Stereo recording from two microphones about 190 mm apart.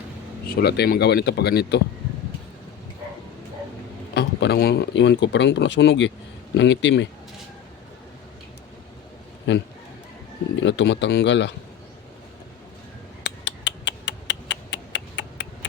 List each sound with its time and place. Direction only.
0.5 s speech: 60° left (ahead or behind)
4.1 s speech: 60° left (ahead or behind)
9.5 s speech: 70° left (ahead or behind)
13.2 s a sound: 65° left (ahead or behind)